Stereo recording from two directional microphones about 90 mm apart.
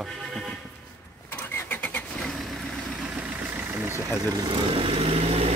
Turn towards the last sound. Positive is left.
turn(degrees=-90)